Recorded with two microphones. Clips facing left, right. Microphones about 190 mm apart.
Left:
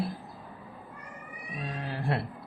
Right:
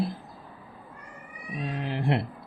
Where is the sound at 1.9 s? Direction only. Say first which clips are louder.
Right 4 dB; 20° right (ahead or behind).